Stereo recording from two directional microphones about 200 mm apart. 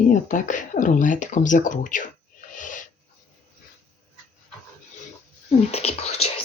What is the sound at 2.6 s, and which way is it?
Wheeze, 40° left (ahead or behind).